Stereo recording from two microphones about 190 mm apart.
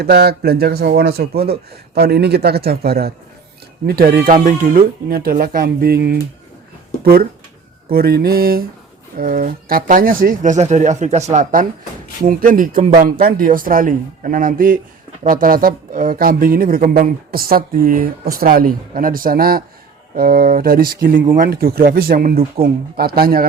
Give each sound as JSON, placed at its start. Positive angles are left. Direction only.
{"t": 0.0, "sound": "speech", "side_deg": -55}